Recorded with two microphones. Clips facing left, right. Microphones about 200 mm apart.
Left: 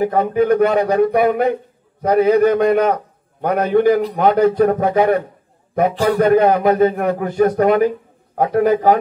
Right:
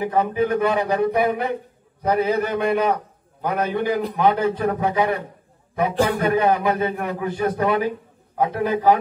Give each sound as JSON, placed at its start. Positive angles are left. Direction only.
{"t": 0.0, "sound": "a man's voice", "side_deg": 45}